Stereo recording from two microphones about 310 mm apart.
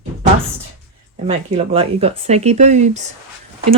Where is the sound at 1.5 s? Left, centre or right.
Centre.